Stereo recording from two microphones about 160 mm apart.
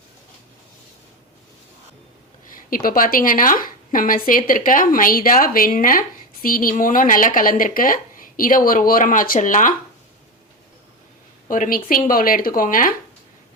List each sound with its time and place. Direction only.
2.5 s a woman's voice: 60° left (ahead or behind)
11.4 s a woman's voice: 55° left (ahead or behind)